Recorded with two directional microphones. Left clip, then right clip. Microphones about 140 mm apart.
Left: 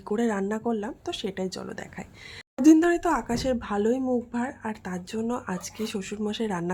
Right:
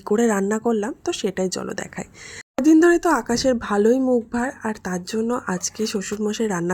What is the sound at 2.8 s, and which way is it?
A woman's voice, 35° right (ahead or behind).